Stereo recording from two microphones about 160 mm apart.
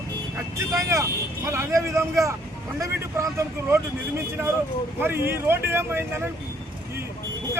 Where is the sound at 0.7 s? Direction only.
20° right (ahead or behind).